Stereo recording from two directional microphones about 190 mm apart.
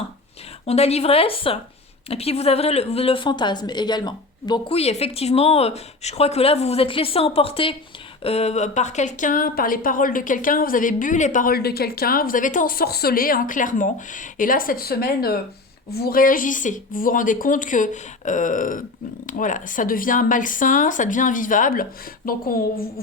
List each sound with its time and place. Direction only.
0.7 s a woman's voice: 35° left (ahead or behind); by 22.6 s 50° left (ahead or behind)